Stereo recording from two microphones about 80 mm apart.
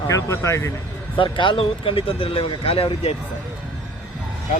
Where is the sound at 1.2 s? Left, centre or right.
Left.